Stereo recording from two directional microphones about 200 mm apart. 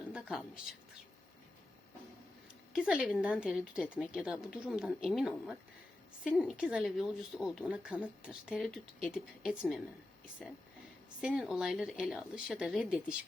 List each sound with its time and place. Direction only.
0.1 s speech: centre (ahead or behind)
2.7 s speech: 5° right (ahead or behind)